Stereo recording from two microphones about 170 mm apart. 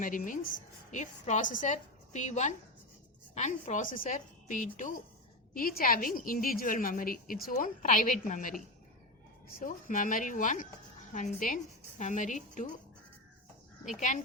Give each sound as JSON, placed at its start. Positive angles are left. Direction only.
{"t": 0.0, "sound": "a woman's voice", "side_deg": 50}